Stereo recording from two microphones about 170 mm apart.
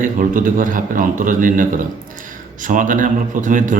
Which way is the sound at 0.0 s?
50° right (ahead or behind).